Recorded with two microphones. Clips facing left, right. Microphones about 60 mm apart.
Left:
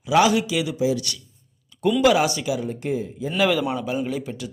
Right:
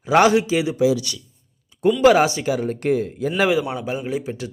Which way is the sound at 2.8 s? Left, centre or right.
Right.